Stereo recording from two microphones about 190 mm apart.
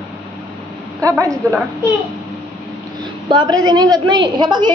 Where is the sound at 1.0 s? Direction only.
15° right (ahead or behind).